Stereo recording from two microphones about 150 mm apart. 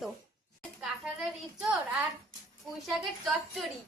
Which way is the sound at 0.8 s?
5° right (ahead or behind).